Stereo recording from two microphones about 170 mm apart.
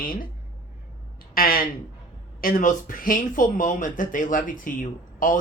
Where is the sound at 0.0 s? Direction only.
60° left (ahead or behind).